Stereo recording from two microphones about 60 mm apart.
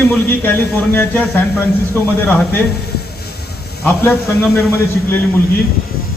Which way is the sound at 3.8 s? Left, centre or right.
Left.